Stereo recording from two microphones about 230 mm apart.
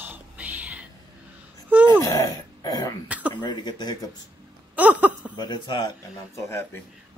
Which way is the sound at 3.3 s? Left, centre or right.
Centre.